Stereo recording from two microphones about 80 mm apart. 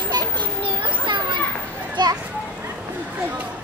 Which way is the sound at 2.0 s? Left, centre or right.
Right.